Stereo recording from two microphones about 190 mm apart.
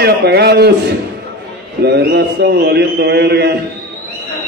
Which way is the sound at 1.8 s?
60° right (ahead or behind).